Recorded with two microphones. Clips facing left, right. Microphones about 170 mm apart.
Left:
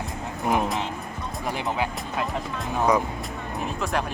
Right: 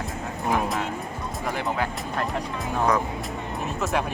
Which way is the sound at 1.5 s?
15° left (ahead or behind).